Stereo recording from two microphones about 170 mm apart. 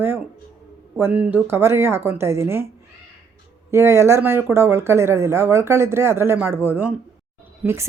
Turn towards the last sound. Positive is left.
turn(degrees=-15)  # may be behind; listen again after turning